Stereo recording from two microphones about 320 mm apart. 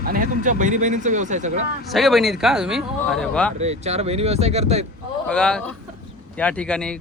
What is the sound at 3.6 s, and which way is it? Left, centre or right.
Speech, centre.